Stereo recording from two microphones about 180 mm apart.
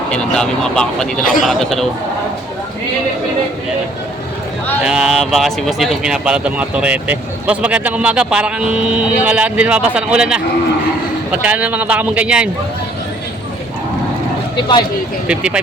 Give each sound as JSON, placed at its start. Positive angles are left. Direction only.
{"t": 0.1, "sound": "speech", "side_deg": 5}
{"t": 4.8, "sound": "a man's voice", "side_deg": -5}
{"t": 14.5, "sound": "speech", "side_deg": 25}
{"t": 15.3, "sound": "a man's voice", "side_deg": -5}